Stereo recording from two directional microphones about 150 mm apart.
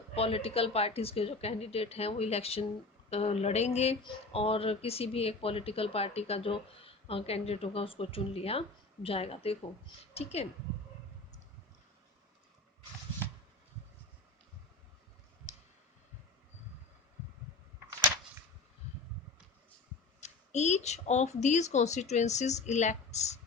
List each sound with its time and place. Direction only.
0.2 s speech: 40° left (ahead or behind)
20.2 s speech: 50° left (ahead or behind)